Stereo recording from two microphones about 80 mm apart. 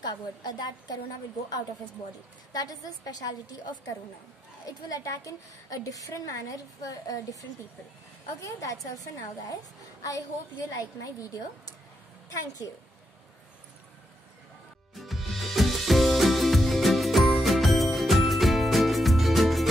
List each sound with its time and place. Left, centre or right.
0.0 s a woman's voice: left
2.5 s a woman's voice: left
4.6 s a woman's voice: left
8.4 s a woman's voice: left
15.0 s music: centre